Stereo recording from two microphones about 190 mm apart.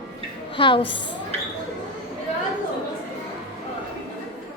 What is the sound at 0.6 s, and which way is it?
Speech, 25° left (ahead or behind).